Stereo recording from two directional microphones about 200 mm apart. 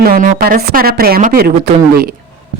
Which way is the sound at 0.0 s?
45° right (ahead or behind).